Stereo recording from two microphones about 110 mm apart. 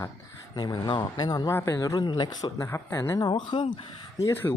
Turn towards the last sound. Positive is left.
turn(degrees=20)  # may be behind; listen again after turning